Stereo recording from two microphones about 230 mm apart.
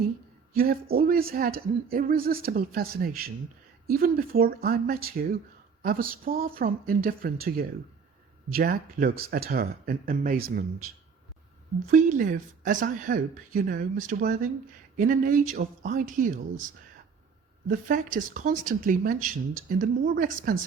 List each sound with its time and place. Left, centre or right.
0.5 s speech: right
11.9 s speech: right